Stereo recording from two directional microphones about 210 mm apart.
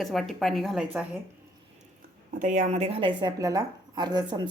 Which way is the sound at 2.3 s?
40° right (ahead or behind).